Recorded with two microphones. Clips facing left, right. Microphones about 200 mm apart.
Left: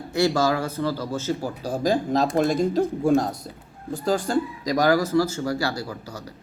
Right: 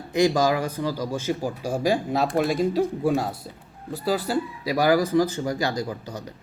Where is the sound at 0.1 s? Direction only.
15° right (ahead or behind).